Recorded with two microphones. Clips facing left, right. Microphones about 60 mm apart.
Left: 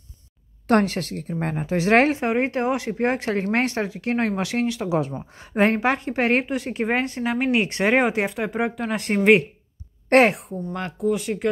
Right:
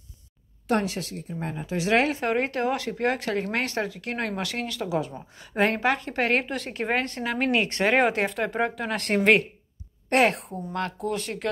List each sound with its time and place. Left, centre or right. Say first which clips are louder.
0.7 s speech: left 6 dB; left
1.7 s speech: left 5 dB; left
2.2 s speech: left 3 dB; left
6.5 s speech: left 4 dB; centre
8.0 s speech: left 1 dB; centre
10.7 s speech: right 3 dB; centre
11.0 s speech: left 6 dB; centre